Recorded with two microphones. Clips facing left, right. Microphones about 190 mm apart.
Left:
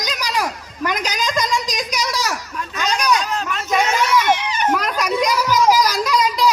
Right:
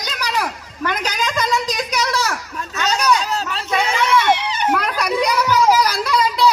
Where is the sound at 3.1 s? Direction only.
30° right (ahead or behind).